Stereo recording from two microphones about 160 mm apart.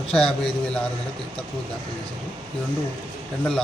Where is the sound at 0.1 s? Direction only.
5° left (ahead or behind).